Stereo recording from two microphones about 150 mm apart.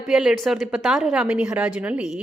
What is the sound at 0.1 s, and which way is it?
A woman's voice, 5° right (ahead or behind).